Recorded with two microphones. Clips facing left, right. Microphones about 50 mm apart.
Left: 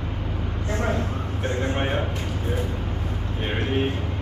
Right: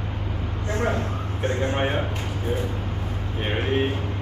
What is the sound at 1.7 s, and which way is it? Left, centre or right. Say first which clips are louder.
Speech: right 1 dB; centre.